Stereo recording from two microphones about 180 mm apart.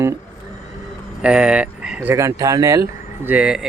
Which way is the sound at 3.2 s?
5° right (ahead or behind).